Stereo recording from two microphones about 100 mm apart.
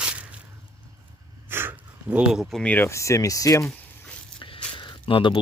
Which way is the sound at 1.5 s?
20° right (ahead or behind).